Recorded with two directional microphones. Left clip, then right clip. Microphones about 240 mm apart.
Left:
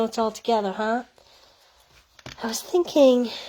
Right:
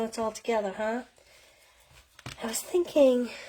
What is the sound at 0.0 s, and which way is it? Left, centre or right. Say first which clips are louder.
Speech: left 7 dB; left.